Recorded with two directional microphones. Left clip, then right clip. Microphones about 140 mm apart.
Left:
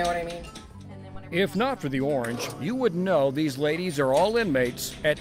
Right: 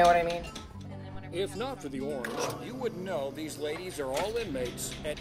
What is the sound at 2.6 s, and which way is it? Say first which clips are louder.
Speech: left 10 dB; 35° left (ahead or behind).